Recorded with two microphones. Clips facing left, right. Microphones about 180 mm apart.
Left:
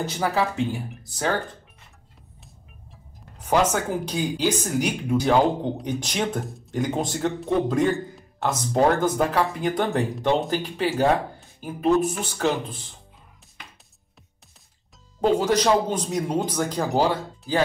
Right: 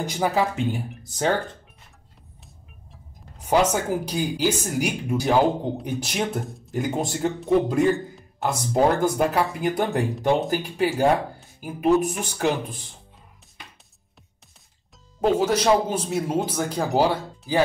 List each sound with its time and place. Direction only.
0.0 s speech: 15° right (ahead or behind)
3.4 s speech: 10° right (ahead or behind)
15.1 s speech: 5° right (ahead or behind)